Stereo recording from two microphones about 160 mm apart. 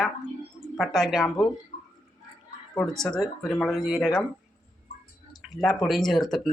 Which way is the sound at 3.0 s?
Centre (ahead or behind).